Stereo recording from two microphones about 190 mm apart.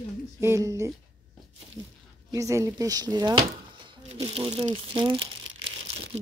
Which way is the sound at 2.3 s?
15° right (ahead or behind).